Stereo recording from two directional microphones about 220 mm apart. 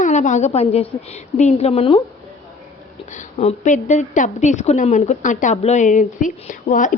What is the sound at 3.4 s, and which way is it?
A woman's voice, 30° left (ahead or behind).